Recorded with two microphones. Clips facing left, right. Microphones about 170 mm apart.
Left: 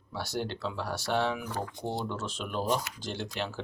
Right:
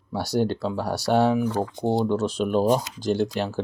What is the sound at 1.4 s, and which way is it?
Speech, 25° right (ahead or behind).